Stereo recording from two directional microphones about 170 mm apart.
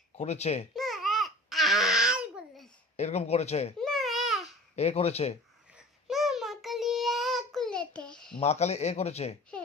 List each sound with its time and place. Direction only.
0.2 s a man's voice: 40° left (ahead or behind)
0.8 s babbling: centre (ahead or behind)
3.0 s a man's voice: 40° left (ahead or behind)
3.8 s babbling: centre (ahead or behind)
4.7 s a man's voice: 40° left (ahead or behind)
6.1 s child singing: centre (ahead or behind)
8.4 s a man's voice: 40° left (ahead or behind)
9.5 s a sound: 5° left (ahead or behind)